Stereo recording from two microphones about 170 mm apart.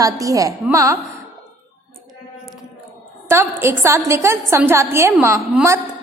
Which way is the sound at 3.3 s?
15° right (ahead or behind).